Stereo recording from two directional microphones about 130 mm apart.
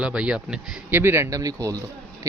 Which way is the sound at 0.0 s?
5° right (ahead or behind).